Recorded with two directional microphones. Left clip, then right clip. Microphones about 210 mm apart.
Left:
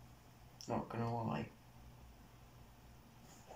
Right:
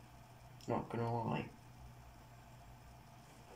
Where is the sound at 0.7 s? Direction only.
15° right (ahead or behind).